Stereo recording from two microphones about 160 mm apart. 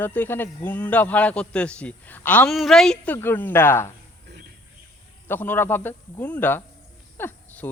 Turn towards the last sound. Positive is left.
turn(degrees=15)  # may be behind; listen again after turning